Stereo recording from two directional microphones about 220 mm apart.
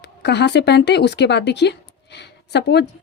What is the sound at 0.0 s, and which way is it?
A woman's voice, 50° left (ahead or behind).